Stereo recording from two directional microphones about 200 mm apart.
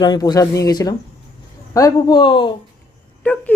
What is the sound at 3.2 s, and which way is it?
Speech, 10° left (ahead or behind).